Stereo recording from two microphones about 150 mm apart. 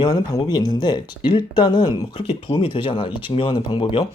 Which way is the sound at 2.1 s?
40° left (ahead or behind).